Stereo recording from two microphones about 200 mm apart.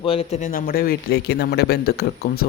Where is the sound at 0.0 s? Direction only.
30° left (ahead or behind).